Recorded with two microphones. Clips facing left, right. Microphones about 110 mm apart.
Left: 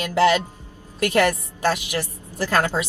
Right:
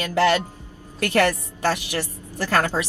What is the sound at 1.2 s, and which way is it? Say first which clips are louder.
Speech: even; 15° left (ahead or behind).